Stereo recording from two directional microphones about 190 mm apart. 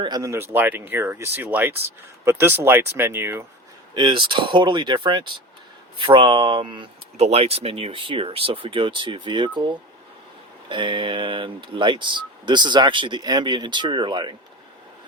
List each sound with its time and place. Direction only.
0.0 s speech: 20° right (ahead or behind)
3.9 s speech: 25° right (ahead or behind)